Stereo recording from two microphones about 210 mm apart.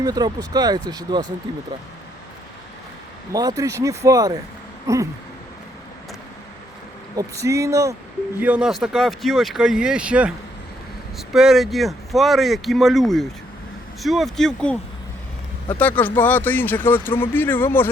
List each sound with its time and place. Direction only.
0.0 s speech: 20° right (ahead or behind)
3.3 s speech: 15° right (ahead or behind)
7.2 s speech: 15° right (ahead or behind); by 14.8 s 5° left (ahead or behind)
15.8 s speech: 10° left (ahead or behind)